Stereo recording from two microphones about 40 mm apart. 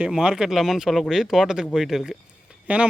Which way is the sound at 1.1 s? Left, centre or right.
Centre.